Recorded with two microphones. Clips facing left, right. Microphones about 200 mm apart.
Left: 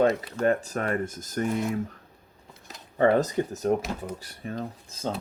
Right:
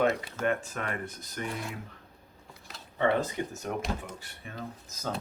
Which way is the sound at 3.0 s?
40° left (ahead or behind).